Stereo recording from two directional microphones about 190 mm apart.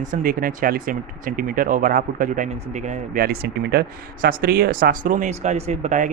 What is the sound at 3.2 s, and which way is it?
Speech, 55° right (ahead or behind).